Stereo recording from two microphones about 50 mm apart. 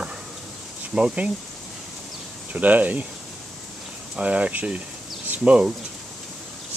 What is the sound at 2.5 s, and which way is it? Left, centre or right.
Speech, right.